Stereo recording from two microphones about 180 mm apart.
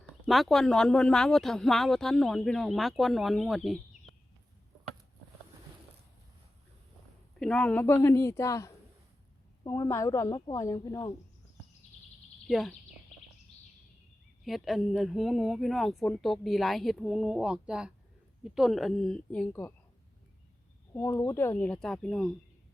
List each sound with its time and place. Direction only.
0.3 s speech: centre (ahead or behind)
7.3 s a woman's voice: 5° left (ahead or behind)
12.5 s speech: centre (ahead or behind)
14.4 s speech: centre (ahead or behind)
20.9 s a woman's voice: 15° left (ahead or behind)